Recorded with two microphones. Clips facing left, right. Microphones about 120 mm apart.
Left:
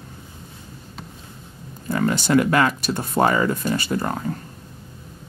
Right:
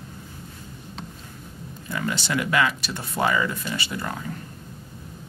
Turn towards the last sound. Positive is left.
turn(degrees=40)  # may be behind; listen again after turning